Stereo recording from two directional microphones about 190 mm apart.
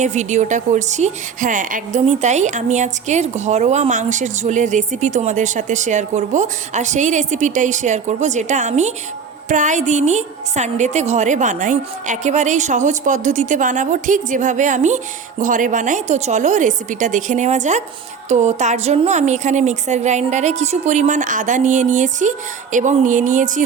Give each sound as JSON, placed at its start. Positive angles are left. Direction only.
{"t": 0.0, "sound": "speech", "side_deg": -40}